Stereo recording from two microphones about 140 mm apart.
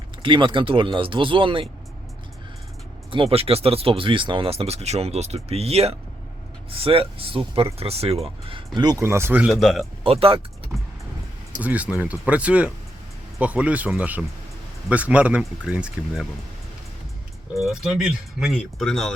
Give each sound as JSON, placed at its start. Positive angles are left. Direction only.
{"t": 0.2, "sound": "speech", "side_deg": -35}
{"t": 3.1, "sound": "speech", "side_deg": -40}
{"t": 9.0, "sound": "speech", "side_deg": -20}
{"t": 9.5, "sound": "speech", "side_deg": 0}
{"t": 10.0, "sound": "speech", "side_deg": -40}
{"t": 11.6, "sound": "speech", "side_deg": -10}
{"t": 17.7, "sound": "speech", "side_deg": -5}